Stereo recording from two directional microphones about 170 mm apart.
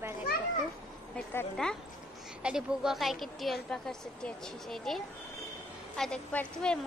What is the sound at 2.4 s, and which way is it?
A woman's voice, 5° right (ahead or behind).